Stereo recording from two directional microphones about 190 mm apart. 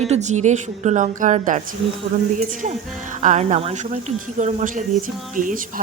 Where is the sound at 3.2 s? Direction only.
40° right (ahead or behind).